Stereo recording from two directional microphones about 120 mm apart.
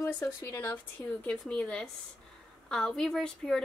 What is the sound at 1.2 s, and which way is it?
A woman's voice, 10° left (ahead or behind).